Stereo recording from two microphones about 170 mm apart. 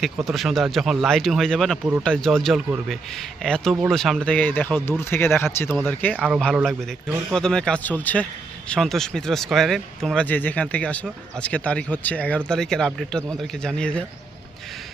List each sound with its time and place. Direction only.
0.3 s a man's voice: centre (ahead or behind)
6.1 s a man's voice: 5° right (ahead or behind)